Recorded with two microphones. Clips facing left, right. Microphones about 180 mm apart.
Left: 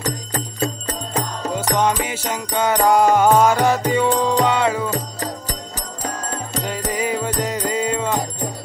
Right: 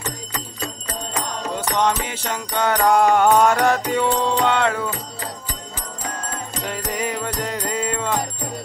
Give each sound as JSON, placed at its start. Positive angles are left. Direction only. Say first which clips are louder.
{"t": 0.0, "sound": "music", "louder": "left 5 dB", "side_deg": 50}
{"t": 1.8, "sound": "music", "louder": "even", "side_deg": 10}
{"t": 4.8, "sound": "music", "louder": "left 4 dB", "side_deg": 40}
{"t": 6.7, "sound": "music", "louder": "left 3 dB", "side_deg": 0}